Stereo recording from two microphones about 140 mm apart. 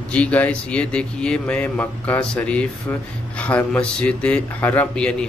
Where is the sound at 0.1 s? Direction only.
10° left (ahead or behind).